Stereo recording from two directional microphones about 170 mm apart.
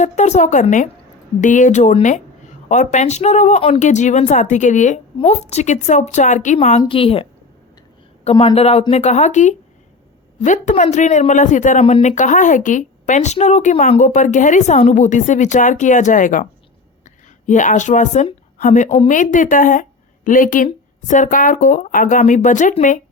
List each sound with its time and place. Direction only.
0.0 s speech: 45° left (ahead or behind)
6.9 s a woman's voice: 35° left (ahead or behind); by 23.0 s 50° left (ahead or behind)